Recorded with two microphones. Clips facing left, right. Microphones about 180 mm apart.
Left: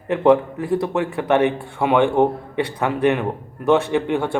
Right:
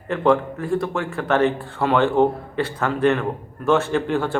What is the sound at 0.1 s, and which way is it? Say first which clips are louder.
Speech: left 3 dB; 20° left (ahead or behind).